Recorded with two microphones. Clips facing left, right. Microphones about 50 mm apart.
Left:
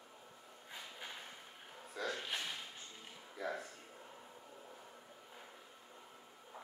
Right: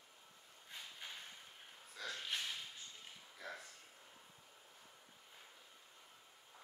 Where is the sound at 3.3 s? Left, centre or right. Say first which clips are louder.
Left 9 dB; left.